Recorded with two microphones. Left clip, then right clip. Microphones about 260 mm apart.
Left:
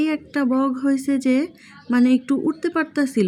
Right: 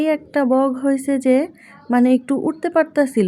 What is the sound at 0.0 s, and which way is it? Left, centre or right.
Speech, centre.